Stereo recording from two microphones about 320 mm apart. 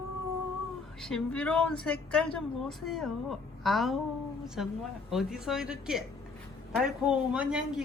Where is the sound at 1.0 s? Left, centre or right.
Centre.